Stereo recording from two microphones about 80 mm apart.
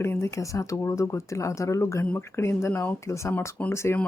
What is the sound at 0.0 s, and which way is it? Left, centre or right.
Speech, left.